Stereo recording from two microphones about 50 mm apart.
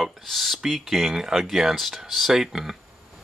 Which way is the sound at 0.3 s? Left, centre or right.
Centre.